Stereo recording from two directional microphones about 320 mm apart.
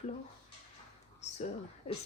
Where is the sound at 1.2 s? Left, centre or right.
Left.